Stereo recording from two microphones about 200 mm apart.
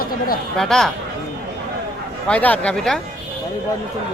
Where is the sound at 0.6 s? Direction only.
Centre (ahead or behind).